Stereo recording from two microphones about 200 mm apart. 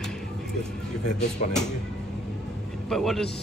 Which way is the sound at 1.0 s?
35° left (ahead or behind).